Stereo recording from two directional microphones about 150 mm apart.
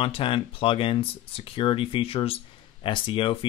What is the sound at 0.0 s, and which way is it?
Speech, 35° left (ahead or behind).